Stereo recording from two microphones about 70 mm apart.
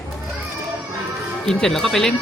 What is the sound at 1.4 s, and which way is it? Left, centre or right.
Speech, centre.